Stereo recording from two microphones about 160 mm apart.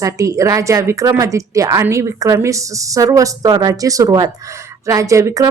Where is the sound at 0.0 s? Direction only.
20° right (ahead or behind).